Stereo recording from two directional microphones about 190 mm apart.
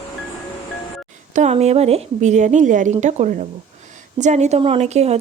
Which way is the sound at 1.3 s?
35° right (ahead or behind).